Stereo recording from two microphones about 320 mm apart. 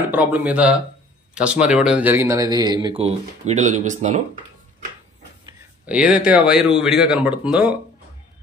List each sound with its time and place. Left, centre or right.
0.1 s a man's voice: centre; by 4.2 s right
5.4 s speech: centre